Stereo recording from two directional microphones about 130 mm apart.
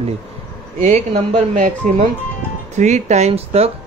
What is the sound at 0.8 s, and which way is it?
Speech, 60° right (ahead or behind).